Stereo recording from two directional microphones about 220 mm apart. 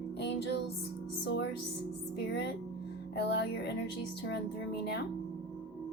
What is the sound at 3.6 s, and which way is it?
Speech, 50° left (ahead or behind).